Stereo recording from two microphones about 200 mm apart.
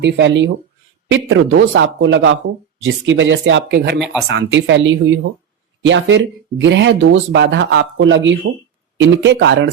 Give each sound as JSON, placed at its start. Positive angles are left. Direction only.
{"t": 0.0, "sound": "speech", "side_deg": -60}
{"t": 3.9, "sound": "speech", "side_deg": 0}
{"t": 4.3, "sound": "speech", "side_deg": -65}